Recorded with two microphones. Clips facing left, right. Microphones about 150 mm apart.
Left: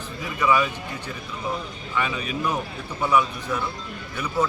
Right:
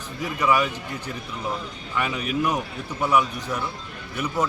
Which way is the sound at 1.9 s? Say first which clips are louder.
Even; 10° right (ahead or behind).